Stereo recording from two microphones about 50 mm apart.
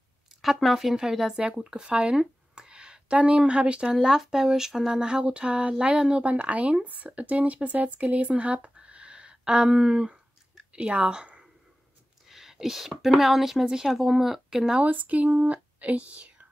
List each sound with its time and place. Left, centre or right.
0.4 s speech: centre; by 3.9 s right
3.9 s speech: centre
6.3 s speech: right
12.3 s speech: centre
14.8 s speech: right